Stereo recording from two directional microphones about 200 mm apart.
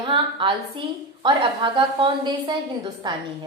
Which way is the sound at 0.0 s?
25° right (ahead or behind).